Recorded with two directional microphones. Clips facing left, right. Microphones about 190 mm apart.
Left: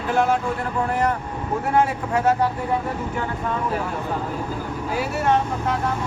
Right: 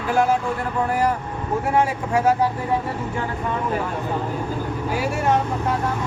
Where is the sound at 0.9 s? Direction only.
10° right (ahead or behind).